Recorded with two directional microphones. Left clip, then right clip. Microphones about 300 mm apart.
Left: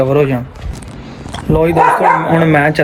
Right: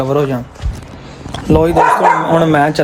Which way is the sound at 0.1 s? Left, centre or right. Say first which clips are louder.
Left 2 dB; centre.